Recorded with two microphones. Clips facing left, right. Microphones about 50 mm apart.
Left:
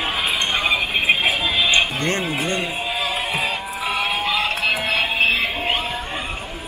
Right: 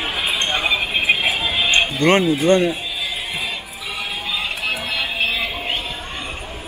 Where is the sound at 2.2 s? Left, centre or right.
Left.